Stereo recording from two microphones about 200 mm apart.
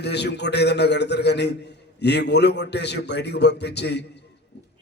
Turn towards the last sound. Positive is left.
turn(degrees=55)  # may be behind; listen again after turning